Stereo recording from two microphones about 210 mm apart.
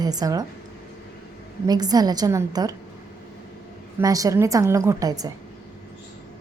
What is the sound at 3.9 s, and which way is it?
A woman's voice, 15° right (ahead or behind).